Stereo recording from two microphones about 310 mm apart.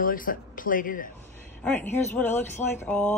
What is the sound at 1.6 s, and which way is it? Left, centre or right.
Speech, centre.